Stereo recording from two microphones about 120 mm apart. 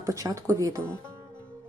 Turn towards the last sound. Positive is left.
turn(degrees=-30)  # may be behind; listen again after turning